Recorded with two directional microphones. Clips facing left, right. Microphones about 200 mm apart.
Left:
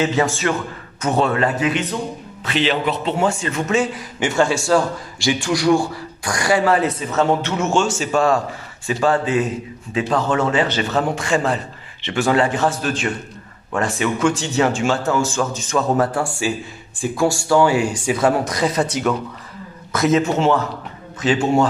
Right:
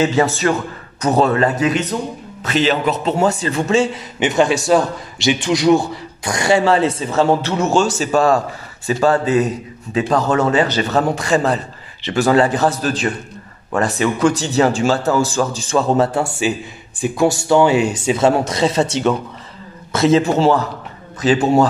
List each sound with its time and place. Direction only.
0.2 s a man's voice: 40° right (ahead or behind)